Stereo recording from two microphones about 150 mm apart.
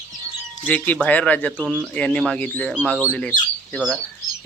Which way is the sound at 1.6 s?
Centre (ahead or behind).